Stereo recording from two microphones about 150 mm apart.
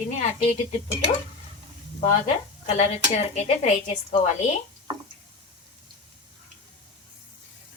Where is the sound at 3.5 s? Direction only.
45° left (ahead or behind).